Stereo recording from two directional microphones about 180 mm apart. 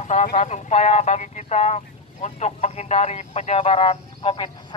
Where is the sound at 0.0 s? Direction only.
45° left (ahead or behind).